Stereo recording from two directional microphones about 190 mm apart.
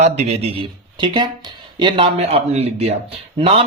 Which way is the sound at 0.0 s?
35° right (ahead or behind).